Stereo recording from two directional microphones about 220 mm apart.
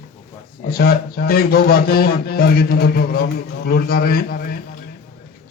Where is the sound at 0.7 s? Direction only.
45° left (ahead or behind).